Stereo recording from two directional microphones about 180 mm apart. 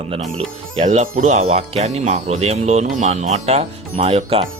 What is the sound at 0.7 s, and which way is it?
Speech, 40° right (ahead or behind).